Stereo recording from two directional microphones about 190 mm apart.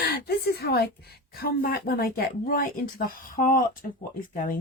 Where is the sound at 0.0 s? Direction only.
55° left (ahead or behind).